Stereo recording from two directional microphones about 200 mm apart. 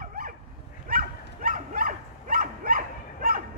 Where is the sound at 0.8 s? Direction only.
45° right (ahead or behind).